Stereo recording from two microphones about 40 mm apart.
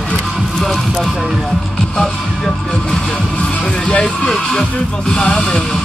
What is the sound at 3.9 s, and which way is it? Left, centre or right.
Speech, left.